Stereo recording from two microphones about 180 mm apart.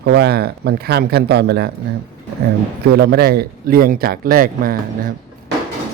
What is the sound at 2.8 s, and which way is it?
Speech, 60° right (ahead or behind).